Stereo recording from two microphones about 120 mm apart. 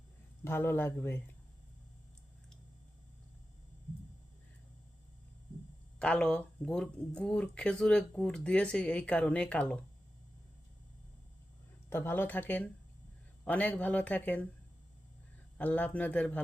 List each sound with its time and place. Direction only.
0.4 s speech: 20° left (ahead or behind)
6.0 s speech: 5° left (ahead or behind)
11.9 s speech: 20° left (ahead or behind)
15.5 s speech: 10° left (ahead or behind)